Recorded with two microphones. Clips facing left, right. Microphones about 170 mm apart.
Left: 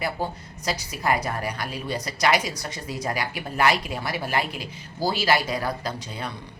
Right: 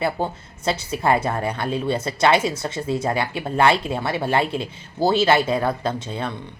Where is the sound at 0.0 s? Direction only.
25° right (ahead or behind).